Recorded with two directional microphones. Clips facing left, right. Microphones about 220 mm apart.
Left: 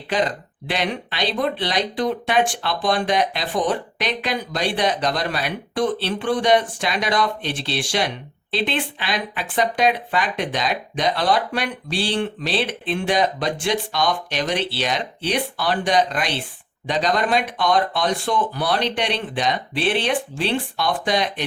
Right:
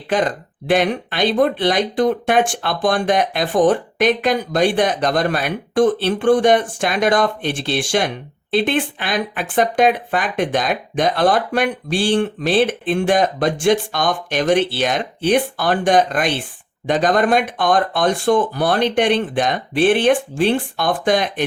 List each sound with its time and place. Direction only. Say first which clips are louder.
0.1 s speech: right 3 dB; 50° right (ahead or behind)